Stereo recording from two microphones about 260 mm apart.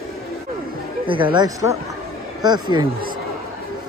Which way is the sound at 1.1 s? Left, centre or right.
Centre.